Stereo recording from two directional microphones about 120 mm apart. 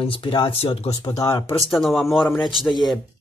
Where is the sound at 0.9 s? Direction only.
30° left (ahead or behind).